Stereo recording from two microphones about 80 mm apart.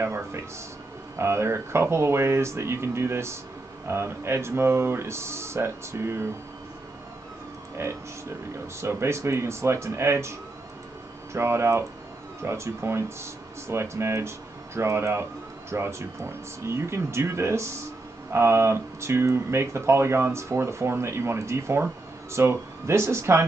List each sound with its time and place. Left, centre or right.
0.0 s speech: right
7.7 s speech: right
11.3 s speech: right